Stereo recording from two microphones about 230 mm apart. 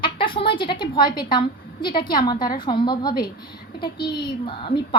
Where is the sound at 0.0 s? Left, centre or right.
Left.